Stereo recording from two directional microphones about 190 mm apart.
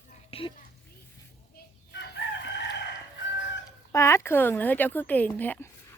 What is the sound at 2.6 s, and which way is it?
Chicken, 70° left (ahead or behind).